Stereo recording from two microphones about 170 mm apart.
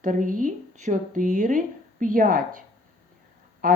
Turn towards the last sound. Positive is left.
turn(degrees=-55)  # may be behind; listen again after turning